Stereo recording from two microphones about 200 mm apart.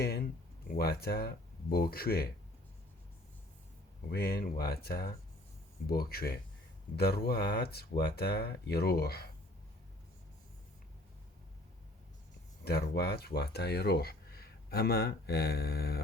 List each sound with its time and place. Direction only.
0.0 s speech: 50° left (ahead or behind)
4.1 s speech: 50° left (ahead or behind)
12.6 s speech: 55° left (ahead or behind)